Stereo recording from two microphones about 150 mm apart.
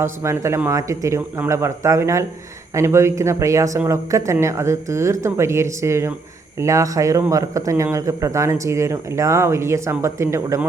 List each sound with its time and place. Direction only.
0.0 s speech: 20° right (ahead or behind)